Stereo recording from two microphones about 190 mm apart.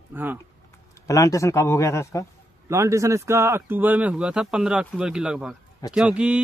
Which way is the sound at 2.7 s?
15° right (ahead or behind).